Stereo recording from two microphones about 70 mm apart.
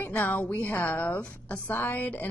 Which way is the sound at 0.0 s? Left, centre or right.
Left.